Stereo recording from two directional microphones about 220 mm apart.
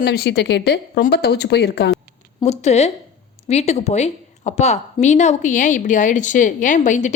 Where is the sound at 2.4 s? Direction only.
30° left (ahead or behind).